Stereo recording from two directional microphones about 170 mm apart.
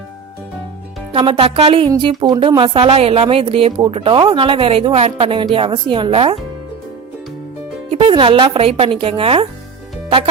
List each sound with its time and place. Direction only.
1.1 s a woman's voice: 30° right (ahead or behind)
7.9 s a woman's voice: 30° right (ahead or behind)